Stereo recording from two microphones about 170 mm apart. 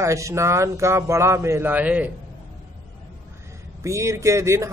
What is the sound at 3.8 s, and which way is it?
Speech, 15° right (ahead or behind).